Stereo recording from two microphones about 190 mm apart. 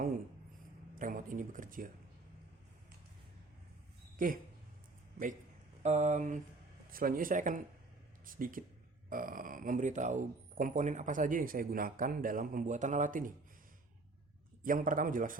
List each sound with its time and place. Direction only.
0.9 s speech: 45° right (ahead or behind)
5.8 s a sound: 40° right (ahead or behind)
6.9 s speech: 50° right (ahead or behind)
14.6 s speech: 45° right (ahead or behind)